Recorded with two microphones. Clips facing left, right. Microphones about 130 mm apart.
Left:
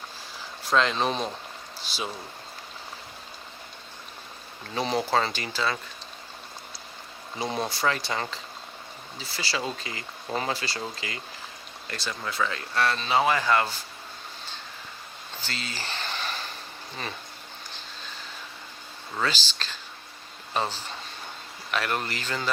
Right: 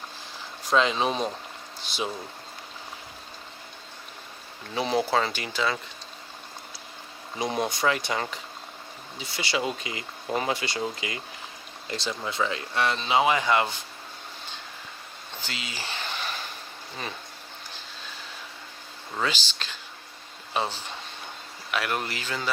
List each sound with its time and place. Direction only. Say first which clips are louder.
0.7 s speech: right 1 dB; 5° right (ahead or behind)
1.8 s speech: right 3 dB; 20° right (ahead or behind)
4.7 s speech: right 1 dB; 10° right (ahead or behind)
7.3 s speech: right 2 dB; 15° right (ahead or behind)
9.5 s speech: right 3 dB; 15° right (ahead or behind)
15.4 s a sound: left 1 dB; 10° right (ahead or behind)
19.1 s speech: even; 15° right (ahead or behind)